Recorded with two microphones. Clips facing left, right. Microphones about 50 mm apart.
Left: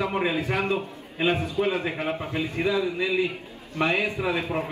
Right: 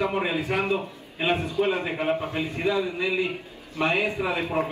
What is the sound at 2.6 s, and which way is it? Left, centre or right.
A man's voice, right.